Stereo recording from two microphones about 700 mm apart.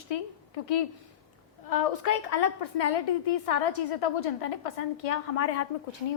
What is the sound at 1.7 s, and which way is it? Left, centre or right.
A woman's voice, left.